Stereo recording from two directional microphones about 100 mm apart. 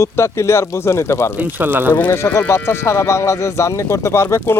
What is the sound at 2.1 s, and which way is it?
Speech, 25° left (ahead or behind).